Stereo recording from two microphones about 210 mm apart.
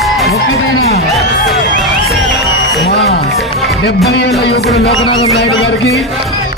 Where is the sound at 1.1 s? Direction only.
Centre (ahead or behind).